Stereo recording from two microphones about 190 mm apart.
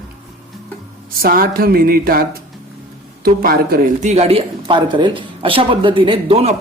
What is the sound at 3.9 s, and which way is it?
Speech, 35° right (ahead or behind).